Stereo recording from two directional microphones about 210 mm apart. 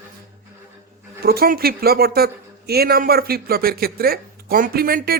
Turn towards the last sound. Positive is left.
turn(degrees=-45)  # may be behind; listen again after turning